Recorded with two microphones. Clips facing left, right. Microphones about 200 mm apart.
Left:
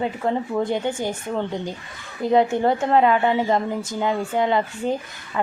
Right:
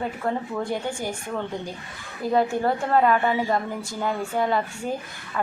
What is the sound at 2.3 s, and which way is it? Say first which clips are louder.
A woman's voice: left 4 dB; 20° left (ahead or behind).